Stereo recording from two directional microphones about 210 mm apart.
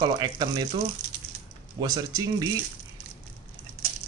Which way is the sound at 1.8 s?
20° right (ahead or behind).